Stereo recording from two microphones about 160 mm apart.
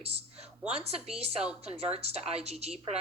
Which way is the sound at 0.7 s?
40° right (ahead or behind).